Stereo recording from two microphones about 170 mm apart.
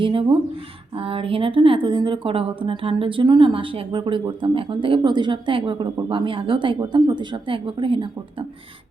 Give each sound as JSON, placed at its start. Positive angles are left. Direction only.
{"t": 0.0, "sound": "a woman's voice", "side_deg": -30}